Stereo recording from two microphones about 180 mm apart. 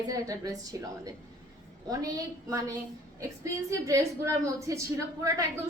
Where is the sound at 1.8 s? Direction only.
20° right (ahead or behind).